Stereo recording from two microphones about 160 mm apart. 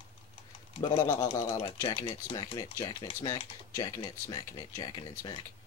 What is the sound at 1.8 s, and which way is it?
Speech, 25° left (ahead or behind).